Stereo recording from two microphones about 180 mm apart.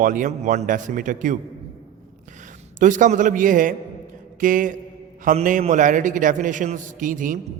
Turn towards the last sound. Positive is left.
turn(degrees=-50)  # may be behind; listen again after turning